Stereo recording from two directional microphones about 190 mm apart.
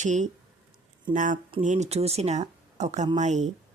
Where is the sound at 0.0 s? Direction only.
40° right (ahead or behind).